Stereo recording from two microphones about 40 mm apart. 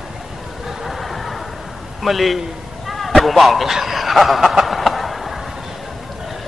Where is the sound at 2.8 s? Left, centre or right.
Centre.